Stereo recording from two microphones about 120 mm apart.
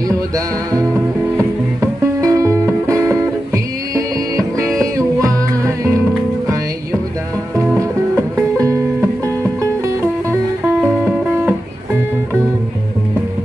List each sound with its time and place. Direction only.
1.8 s music: 25° right (ahead or behind)
8.5 s music: 25° right (ahead or behind)